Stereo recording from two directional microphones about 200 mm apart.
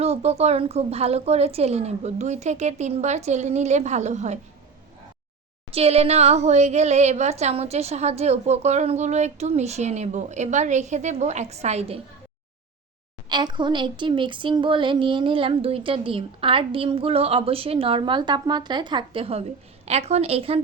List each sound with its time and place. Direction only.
0.0 s speech: 30° right (ahead or behind)
5.7 s speech: 30° right (ahead or behind)
13.2 s speech: 20° right (ahead or behind)